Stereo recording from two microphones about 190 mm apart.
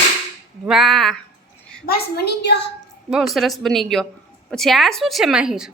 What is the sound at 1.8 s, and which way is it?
Speech, 55° left (ahead or behind).